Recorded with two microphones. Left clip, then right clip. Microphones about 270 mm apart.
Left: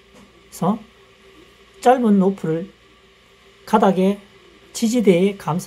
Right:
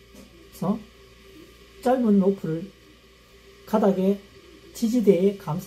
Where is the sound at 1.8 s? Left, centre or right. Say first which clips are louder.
Left 7 dB; left.